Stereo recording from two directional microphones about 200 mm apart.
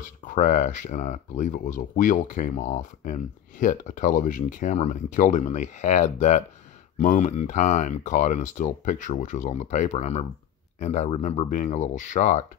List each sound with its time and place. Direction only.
0.2 s speech: 40° left (ahead or behind)